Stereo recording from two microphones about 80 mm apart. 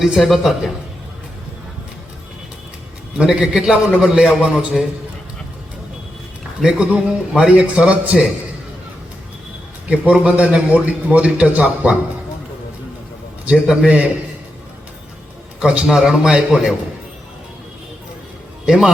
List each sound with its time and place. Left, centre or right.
0.0 s speech: centre
3.2 s a man's voice: centre
6.6 s a man's voice: centre
10.1 s a man's voice: centre
13.4 s a man's voice: centre
15.6 s a man's voice: centre
18.6 s a man's voice: centre